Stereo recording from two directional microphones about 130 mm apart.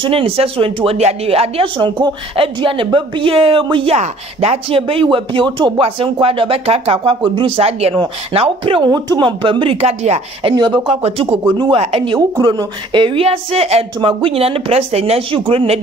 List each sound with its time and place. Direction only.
0.0 s a woman's voice: 45° right (ahead or behind)
3.9 s a woman's voice: 55° right (ahead or behind)
10.4 s a woman's voice: 35° right (ahead or behind)
11.0 s a woman's voice: 50° right (ahead or behind)
11.5 s a woman's voice: 40° right (ahead or behind)